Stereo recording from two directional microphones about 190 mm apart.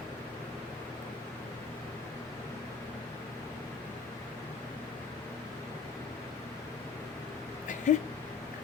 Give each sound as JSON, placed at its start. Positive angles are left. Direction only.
{"t": 7.9, "sound": "speech", "side_deg": 40}